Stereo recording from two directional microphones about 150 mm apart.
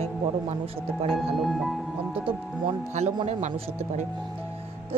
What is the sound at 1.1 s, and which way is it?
Speech, centre (ahead or behind).